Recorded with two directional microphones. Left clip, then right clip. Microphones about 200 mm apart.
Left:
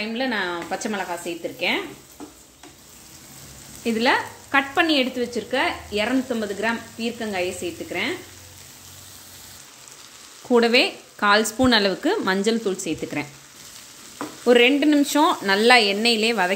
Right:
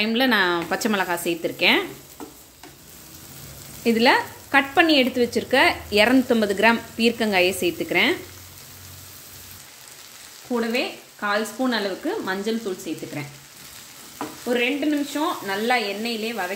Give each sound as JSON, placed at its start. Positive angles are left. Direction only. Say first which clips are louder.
{"t": 0.0, "sound": "sizzle", "louder": "right 5 dB", "side_deg": -25}
{"t": 3.8, "sound": "sizzle", "louder": "right 3 dB", "side_deg": -10}
{"t": 10.5, "sound": "speech", "louder": "left 7 dB", "side_deg": 50}
{"t": 14.4, "sound": "speech", "louder": "left 7 dB", "side_deg": 55}